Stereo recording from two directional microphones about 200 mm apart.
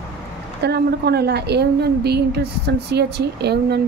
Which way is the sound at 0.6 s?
55° right (ahead or behind).